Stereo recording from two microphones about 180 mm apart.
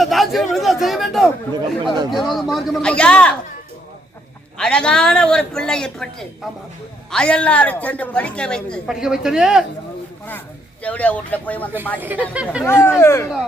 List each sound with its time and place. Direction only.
0.0 s a woman's voice: centre (ahead or behind)
1.8 s speech: 25° right (ahead or behind)
2.1 s a woman's voice: centre (ahead or behind)
4.5 s a woman's voice: 5° left (ahead or behind)
10.8 s speech: 10° left (ahead or behind)
11.9 s speech: 10° right (ahead or behind)
12.6 s speech: 15° left (ahead or behind)